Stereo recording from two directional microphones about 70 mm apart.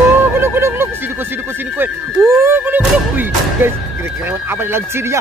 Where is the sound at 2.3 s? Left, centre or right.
Right.